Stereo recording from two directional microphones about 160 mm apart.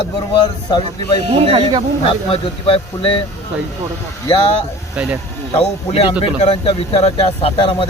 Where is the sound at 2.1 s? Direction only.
35° left (ahead or behind).